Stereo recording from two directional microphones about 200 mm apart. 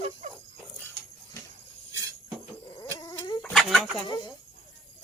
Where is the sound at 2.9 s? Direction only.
10° left (ahead or behind).